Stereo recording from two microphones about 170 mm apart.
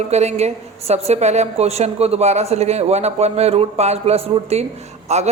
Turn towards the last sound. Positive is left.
turn(degrees=-40)  # may be behind; listen again after turning